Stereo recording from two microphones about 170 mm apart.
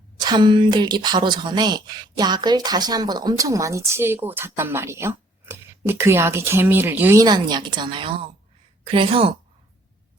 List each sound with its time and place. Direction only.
0.2 s a woman's voice: 25° right (ahead or behind)